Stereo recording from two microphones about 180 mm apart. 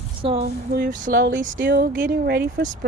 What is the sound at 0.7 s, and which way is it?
Speech, 45° right (ahead or behind).